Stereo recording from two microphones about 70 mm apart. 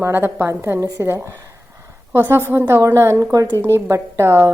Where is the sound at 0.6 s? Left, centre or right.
Right.